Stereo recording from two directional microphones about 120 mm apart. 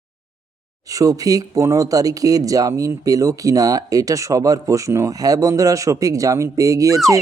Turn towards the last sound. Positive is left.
turn(degrees=-30)  # may be behind; listen again after turning